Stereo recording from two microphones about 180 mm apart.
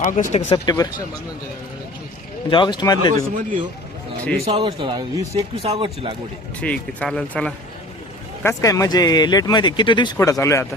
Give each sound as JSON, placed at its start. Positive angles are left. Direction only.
{"t": 0.0, "sound": "speech", "side_deg": 45}
{"t": 0.5, "sound": "speech", "side_deg": 20}
{"t": 2.5, "sound": "speech", "side_deg": 25}
{"t": 3.3, "sound": "speech", "side_deg": -45}
{"t": 4.4, "sound": "a man's voice", "side_deg": -30}
{"t": 6.6, "sound": "speech", "side_deg": 5}
{"t": 8.4, "sound": "speech", "side_deg": 15}